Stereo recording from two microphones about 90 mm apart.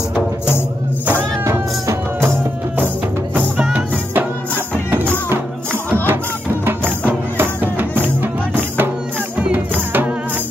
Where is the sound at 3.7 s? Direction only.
20° right (ahead or behind).